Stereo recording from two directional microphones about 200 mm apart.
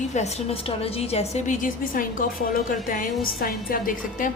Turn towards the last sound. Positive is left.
turn(degrees=45)  # may be behind; listen again after turning